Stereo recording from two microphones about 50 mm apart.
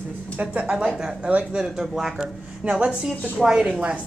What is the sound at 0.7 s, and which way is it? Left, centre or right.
Speech, centre.